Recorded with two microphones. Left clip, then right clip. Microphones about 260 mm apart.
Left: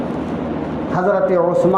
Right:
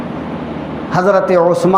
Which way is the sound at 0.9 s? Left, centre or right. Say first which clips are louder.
Right 5 dB; right.